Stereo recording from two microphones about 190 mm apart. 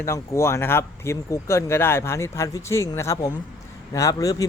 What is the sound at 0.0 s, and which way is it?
Speech, 15° left (ahead or behind).